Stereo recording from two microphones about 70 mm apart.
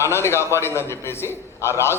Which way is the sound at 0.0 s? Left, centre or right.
Left.